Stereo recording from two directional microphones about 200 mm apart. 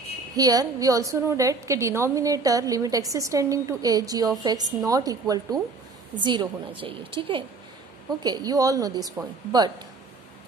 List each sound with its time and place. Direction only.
0.4 s a woman's voice: 20° right (ahead or behind)